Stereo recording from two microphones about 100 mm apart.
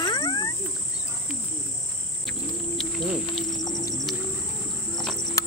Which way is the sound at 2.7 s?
Centre (ahead or behind).